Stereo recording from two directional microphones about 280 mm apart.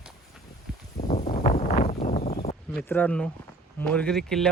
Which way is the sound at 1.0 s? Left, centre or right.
Left.